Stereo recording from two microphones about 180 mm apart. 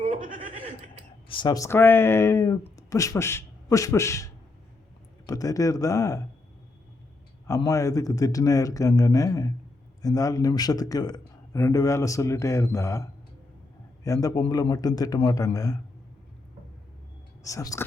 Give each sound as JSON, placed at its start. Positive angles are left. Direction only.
{"t": 0.0, "sound": "chuckle", "side_deg": -45}
{"t": 1.3, "sound": "a man's voice", "side_deg": 25}
{"t": 7.7, "sound": "a man's voice", "side_deg": 15}
{"t": 17.4, "sound": "speech", "side_deg": 20}